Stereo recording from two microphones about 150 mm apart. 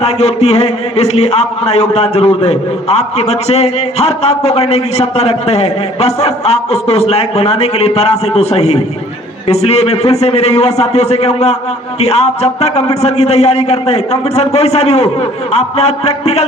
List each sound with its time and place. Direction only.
0.0 s a man's voice: 45° left (ahead or behind)